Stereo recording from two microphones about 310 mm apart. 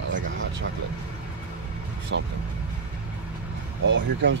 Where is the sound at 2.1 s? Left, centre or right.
Right.